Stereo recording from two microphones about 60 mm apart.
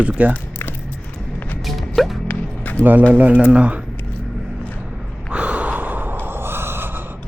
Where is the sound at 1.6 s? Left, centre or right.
Centre.